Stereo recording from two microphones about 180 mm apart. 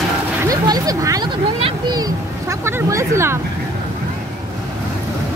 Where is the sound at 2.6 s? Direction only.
15° right (ahead or behind).